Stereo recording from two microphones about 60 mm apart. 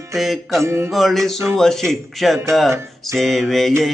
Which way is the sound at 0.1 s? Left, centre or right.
Centre.